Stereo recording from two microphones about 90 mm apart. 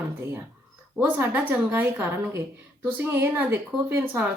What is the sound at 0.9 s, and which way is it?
A woman's voice, 20° right (ahead or behind).